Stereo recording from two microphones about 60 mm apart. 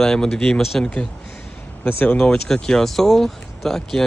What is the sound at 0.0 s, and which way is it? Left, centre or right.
Speech, centre.